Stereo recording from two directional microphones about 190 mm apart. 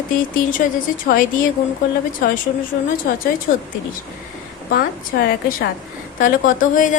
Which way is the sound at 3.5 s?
45° left (ahead or behind).